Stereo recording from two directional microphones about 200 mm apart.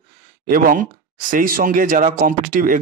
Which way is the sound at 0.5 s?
45° right (ahead or behind).